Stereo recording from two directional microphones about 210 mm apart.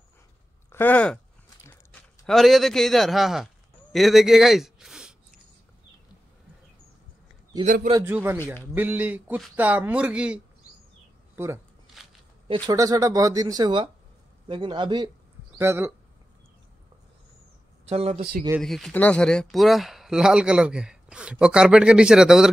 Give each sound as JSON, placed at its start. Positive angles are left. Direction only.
{"t": 0.7, "sound": "chewing", "side_deg": 10}
{"t": 2.2, "sound": "a man's voice", "side_deg": 0}
{"t": 7.6, "sound": "a man's voice", "side_deg": -40}
{"t": 8.0, "sound": "a man's voice", "side_deg": -10}
{"t": 15.5, "sound": "speech", "side_deg": -10}
{"t": 17.8, "sound": "a man's voice", "side_deg": -30}
{"t": 18.6, "sound": "speech", "side_deg": 0}